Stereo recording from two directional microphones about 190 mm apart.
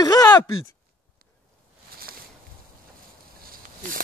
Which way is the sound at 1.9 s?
50° right (ahead or behind).